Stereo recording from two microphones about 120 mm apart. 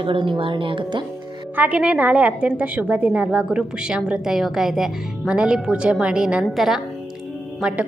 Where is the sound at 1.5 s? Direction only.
15° right (ahead or behind).